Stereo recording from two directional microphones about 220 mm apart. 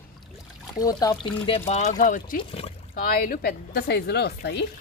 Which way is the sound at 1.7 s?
35° left (ahead or behind).